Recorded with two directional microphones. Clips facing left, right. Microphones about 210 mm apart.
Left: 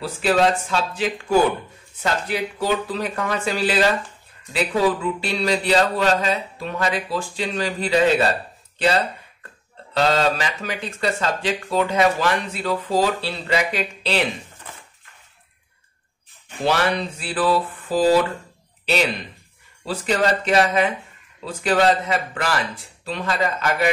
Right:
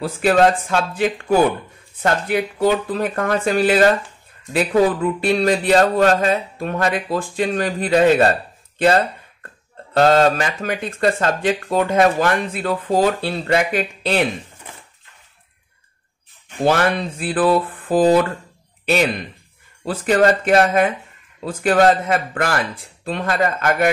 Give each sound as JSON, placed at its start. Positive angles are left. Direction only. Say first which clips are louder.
{"t": 0.0, "sound": "speech", "louder": "right 4 dB", "side_deg": -50}
{"t": 16.6, "sound": "speech", "louder": "right 4 dB", "side_deg": -50}
{"t": 19.8, "sound": "speech", "louder": "right 5 dB", "side_deg": -50}